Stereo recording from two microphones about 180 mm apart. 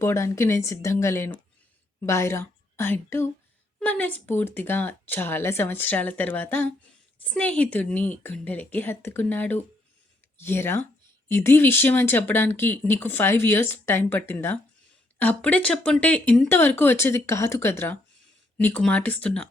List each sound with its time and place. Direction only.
0.0 s a woman's voice: 15° left (ahead or behind)